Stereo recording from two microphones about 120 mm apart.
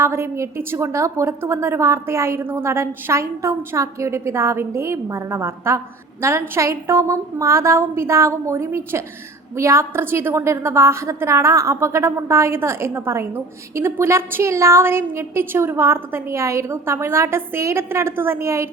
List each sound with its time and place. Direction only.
0.0 s a woman's voice: 20° right (ahead or behind)